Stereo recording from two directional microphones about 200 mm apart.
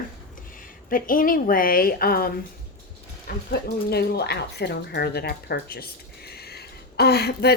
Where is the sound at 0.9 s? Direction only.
45° left (ahead or behind).